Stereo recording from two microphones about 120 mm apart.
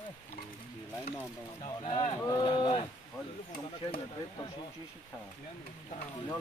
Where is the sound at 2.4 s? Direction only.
45° left (ahead or behind).